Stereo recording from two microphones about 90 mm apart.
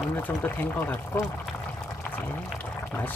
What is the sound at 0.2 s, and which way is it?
Speech, 20° left (ahead or behind).